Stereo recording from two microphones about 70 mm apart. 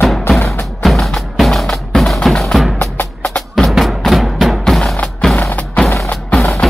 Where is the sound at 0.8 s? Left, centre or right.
Centre.